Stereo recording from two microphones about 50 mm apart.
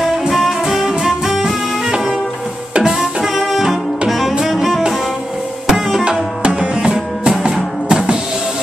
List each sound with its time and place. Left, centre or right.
0.0 s music: centre
5.7 s tabla: centre
6.0 s music: centre